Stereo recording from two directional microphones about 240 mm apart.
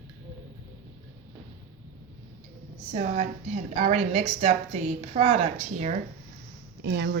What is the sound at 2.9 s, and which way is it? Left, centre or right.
A woman's voice, right.